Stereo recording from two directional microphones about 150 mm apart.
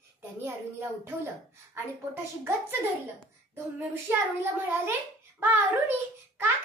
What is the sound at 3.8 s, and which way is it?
A child's voice, 15° right (ahead or behind).